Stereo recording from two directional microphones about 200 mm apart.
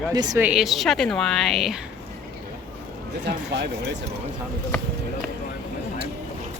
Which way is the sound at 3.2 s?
60° right (ahead or behind).